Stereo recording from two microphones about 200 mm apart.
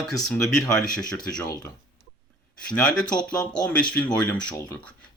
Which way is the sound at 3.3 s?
20° left (ahead or behind).